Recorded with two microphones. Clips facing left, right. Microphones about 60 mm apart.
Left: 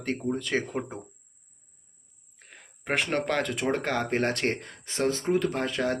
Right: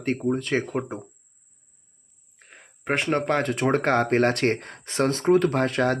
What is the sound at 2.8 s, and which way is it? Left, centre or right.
Speech, right.